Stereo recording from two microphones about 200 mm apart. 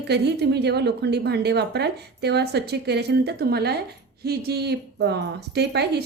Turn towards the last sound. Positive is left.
turn(degrees=-55)  # may be behind; listen again after turning